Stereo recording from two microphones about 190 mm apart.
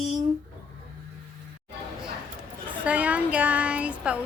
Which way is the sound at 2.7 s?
5° right (ahead or behind).